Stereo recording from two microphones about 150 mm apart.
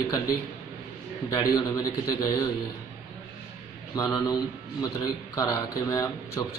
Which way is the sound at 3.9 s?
25° left (ahead or behind).